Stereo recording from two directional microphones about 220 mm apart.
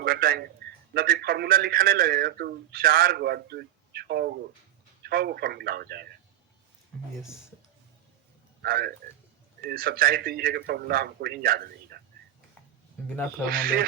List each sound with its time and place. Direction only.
0.0 s a man's voice: 40° right (ahead or behind)
8.6 s a man's voice: 45° right (ahead or behind)
13.4 s speech: 40° right (ahead or behind)